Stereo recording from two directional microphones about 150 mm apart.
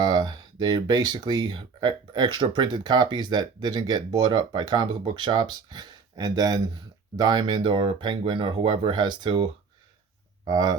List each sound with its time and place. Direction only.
0.0 s speech: 30° right (ahead or behind)